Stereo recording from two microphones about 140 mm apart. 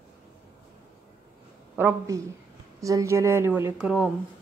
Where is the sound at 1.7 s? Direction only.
20° right (ahead or behind).